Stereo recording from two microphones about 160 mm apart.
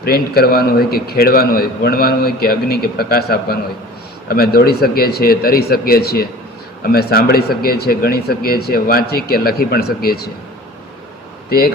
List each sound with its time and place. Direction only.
0.0 s a man's voice: 75° left (ahead or behind)
11.4 s speech: 70° left (ahead or behind)